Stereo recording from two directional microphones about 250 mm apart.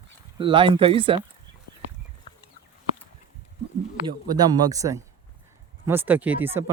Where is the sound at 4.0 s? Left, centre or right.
Centre.